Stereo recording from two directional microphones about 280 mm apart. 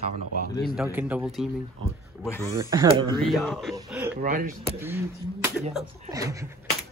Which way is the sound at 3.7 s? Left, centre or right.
Centre.